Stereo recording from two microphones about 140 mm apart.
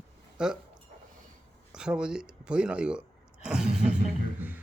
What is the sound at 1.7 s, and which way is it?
Speech, 5° right (ahead or behind).